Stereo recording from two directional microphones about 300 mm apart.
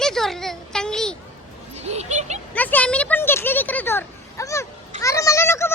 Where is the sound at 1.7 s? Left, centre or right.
Right.